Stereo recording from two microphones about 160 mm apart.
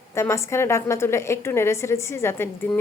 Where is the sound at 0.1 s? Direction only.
15° left (ahead or behind).